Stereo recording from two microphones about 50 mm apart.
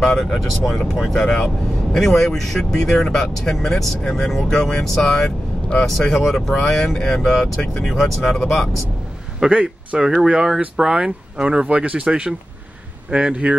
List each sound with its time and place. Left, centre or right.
0.0 s speech: centre
1.1 s speech: centre
4.8 s speech: centre
9.4 s a man's voice: right